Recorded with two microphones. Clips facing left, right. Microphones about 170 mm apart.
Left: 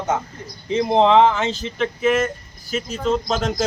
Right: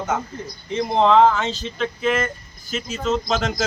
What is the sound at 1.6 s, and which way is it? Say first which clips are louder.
A man's voice: left 3 dB; 10° left (ahead or behind).